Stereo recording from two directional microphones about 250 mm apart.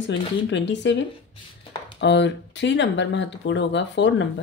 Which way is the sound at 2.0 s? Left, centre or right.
Left.